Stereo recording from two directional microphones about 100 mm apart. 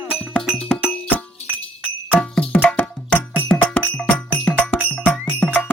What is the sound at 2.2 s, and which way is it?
Music, 15° left (ahead or behind).